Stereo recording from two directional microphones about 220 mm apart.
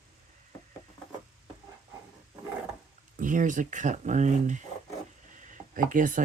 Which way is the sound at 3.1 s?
35° right (ahead or behind).